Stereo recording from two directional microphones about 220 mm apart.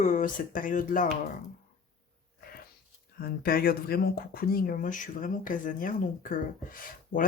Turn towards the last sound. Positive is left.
turn(degrees=40)  # may be behind; listen again after turning